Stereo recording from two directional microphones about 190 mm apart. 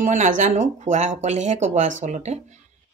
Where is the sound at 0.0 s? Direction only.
40° right (ahead or behind).